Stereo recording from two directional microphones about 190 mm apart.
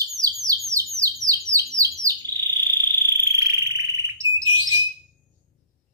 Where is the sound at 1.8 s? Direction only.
15° right (ahead or behind).